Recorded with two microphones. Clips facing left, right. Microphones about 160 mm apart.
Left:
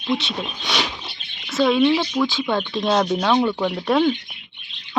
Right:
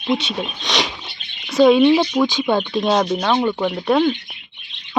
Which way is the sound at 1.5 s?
20° right (ahead or behind).